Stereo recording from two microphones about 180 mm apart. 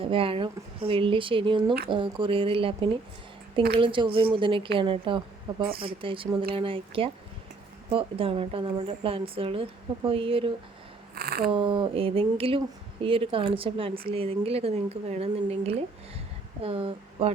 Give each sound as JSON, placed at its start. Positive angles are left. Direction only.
{"t": 0.0, "sound": "a woman's voice", "side_deg": -30}
{"t": 11.1, "sound": "a sound", "side_deg": -60}
{"t": 11.5, "sound": "speech", "side_deg": -25}